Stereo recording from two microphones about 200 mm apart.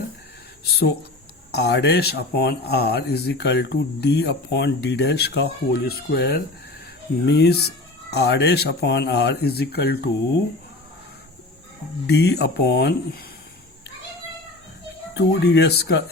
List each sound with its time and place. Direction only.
0.7 s speech: 55° left (ahead or behind)
12.0 s speech: 55° left (ahead or behind)
15.1 s speech: 60° left (ahead or behind)